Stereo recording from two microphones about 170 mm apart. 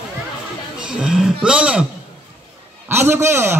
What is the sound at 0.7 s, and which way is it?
Speech, 5° right (ahead or behind).